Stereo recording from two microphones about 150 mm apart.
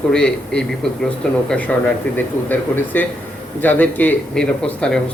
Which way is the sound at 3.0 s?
10° left (ahead or behind).